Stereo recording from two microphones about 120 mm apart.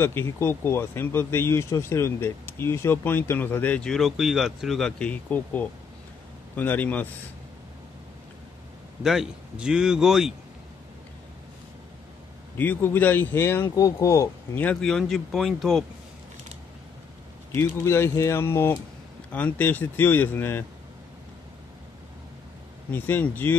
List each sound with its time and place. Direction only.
0.0 s speech: 20° left (ahead or behind)
9.0 s speech: 5° right (ahead or behind)
12.5 s speech: 15° left (ahead or behind)
14.6 s speech: 10° left (ahead or behind)
17.7 s speech: 20° left (ahead or behind)
22.8 s speech: 15° left (ahead or behind)